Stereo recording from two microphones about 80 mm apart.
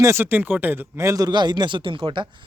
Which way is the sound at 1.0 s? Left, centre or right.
Right.